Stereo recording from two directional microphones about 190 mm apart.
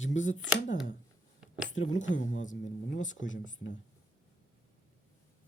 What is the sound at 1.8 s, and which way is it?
Speech, 40° left (ahead or behind).